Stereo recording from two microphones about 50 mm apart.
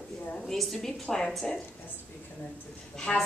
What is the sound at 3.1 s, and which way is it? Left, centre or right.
Speech, centre.